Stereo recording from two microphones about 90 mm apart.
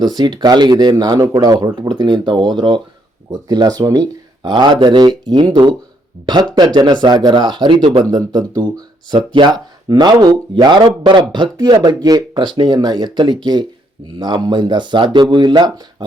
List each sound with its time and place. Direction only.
0.0 s speech: 50° right (ahead or behind)
1.5 s speech: 60° right (ahead or behind)
12.3 s speech: 65° right (ahead or behind)